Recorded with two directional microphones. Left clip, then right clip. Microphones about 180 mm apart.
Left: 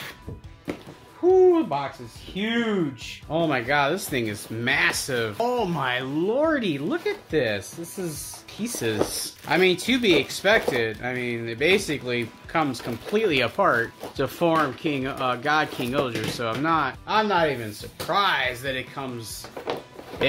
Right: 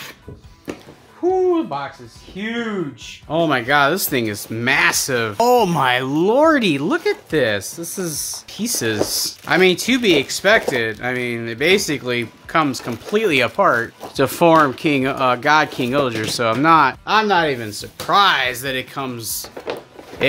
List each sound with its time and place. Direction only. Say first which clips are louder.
1.2 s speech: right 1 dB; 30° right (ahead or behind)
3.3 s speech: right 6 dB; 50° right (ahead or behind); by 13.8 s 25° right (ahead or behind)
14.1 s speech: right 9 dB; 45° right (ahead or behind)
17.0 s speech: right 6 dB; 60° right (ahead or behind)